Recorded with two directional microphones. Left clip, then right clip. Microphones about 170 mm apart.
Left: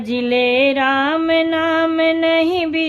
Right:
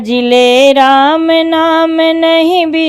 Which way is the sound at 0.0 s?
40° right (ahead or behind).